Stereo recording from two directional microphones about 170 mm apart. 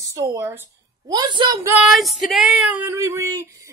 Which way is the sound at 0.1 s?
20° right (ahead or behind).